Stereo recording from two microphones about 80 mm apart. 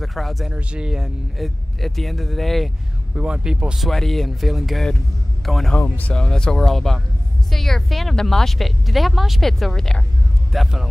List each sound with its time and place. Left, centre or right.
0.0 s speech: centre
0.5 s speech: centre
3.2 s speech: centre
5.8 s speech: centre